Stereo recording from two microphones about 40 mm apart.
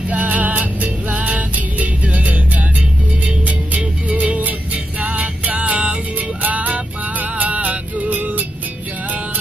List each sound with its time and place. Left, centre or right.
0.1 s music: right